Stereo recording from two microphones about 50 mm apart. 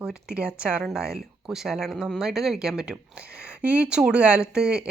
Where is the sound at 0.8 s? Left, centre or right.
Centre.